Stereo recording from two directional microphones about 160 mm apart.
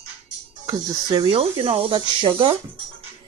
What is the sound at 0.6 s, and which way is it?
Speech, 25° right (ahead or behind).